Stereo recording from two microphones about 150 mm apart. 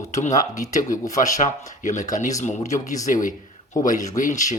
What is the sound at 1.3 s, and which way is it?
Speech, 55° left (ahead or behind).